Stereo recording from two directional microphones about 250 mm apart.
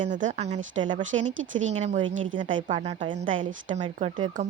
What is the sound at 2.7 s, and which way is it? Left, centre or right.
A woman's voice, right.